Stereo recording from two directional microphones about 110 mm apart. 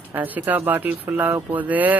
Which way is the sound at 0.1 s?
15° right (ahead or behind).